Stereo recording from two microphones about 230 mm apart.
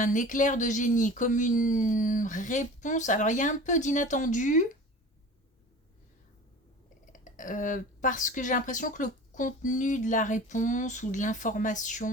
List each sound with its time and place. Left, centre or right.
0.0 s speech: left
7.0 s speech: left